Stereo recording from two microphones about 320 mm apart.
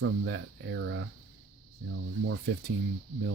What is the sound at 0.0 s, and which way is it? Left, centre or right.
Speech, right.